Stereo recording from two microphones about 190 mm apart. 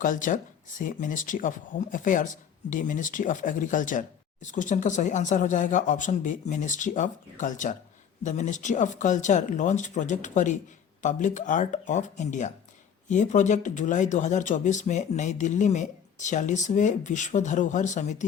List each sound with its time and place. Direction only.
0.0 s speech: 45° left (ahead or behind)